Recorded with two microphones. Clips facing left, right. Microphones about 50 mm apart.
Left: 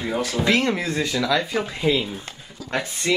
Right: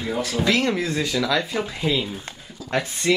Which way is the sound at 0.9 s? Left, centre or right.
Centre.